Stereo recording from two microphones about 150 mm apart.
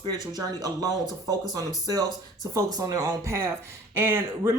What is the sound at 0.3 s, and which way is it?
Speech, 25° right (ahead or behind).